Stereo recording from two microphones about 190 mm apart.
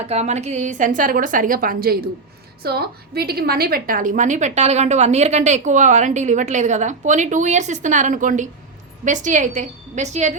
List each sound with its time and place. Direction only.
0.0 s a woman's voice: 35° right (ahead or behind)